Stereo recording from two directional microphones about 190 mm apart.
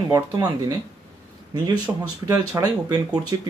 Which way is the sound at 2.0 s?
20° right (ahead or behind).